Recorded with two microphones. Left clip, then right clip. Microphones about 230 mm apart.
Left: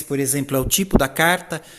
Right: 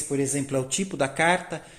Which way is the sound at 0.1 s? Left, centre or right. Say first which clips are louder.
Left 5 dB; left.